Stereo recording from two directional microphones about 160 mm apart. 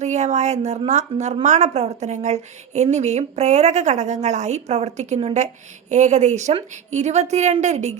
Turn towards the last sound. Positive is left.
turn(degrees=-45)  # may be behind; listen again after turning